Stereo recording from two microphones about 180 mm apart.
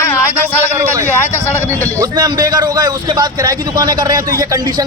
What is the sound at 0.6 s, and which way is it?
A man's voice, 15° right (ahead or behind).